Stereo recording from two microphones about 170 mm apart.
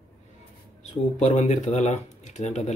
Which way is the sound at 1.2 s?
45° left (ahead or behind).